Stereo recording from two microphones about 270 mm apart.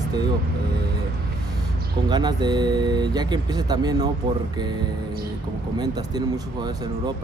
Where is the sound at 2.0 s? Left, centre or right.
Centre.